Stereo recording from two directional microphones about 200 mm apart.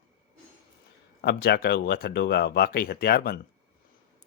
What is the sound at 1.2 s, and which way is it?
Speech, 50° left (ahead or behind).